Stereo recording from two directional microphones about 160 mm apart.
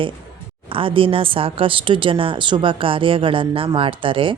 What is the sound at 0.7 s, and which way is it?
Speech, 35° right (ahead or behind).